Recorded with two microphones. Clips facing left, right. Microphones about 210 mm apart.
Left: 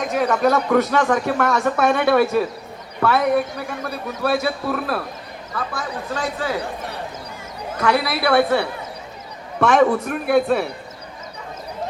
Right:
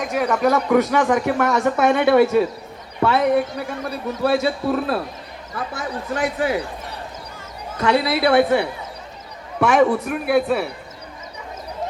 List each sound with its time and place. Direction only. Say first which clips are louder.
0.0 s a man's voice: left 1 dB; 10° right (ahead or behind)
7.8 s a man's voice: right 2 dB; 25° right (ahead or behind); by 10.7 s 5° right (ahead or behind)